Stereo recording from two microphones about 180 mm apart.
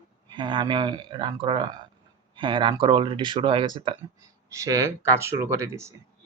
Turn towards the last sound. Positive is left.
turn(degrees=-15)  # may be behind; listen again after turning